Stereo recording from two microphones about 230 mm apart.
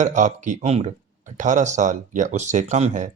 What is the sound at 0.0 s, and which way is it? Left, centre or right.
Speech, right.